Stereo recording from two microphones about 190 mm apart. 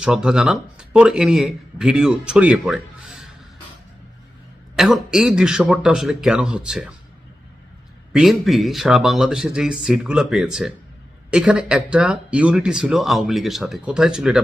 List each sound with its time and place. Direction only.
0.0 s speech: 5° right (ahead or behind)
4.8 s speech: centre (ahead or behind)
8.1 s speech: centre (ahead or behind)